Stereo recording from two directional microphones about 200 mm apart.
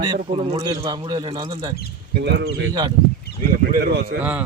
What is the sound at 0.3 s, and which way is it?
Speech, 30° right (ahead or behind).